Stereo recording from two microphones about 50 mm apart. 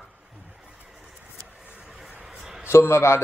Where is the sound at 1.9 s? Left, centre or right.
Centre.